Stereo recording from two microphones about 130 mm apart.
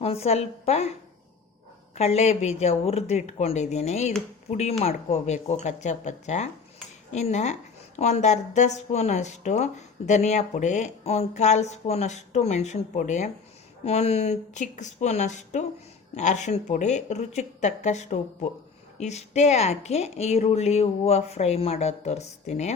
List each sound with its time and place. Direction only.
0.0 s a woman's voice: 50° left (ahead or behind)
2.0 s a woman's voice: 60° left (ahead or behind)
13.8 s a woman's voice: 55° left (ahead or behind)